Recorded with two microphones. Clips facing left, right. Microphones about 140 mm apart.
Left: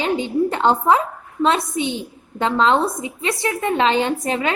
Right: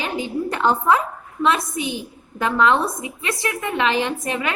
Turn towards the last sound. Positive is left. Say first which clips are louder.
# left 3 dB
turn(degrees=30)  # may be behind; listen again after turning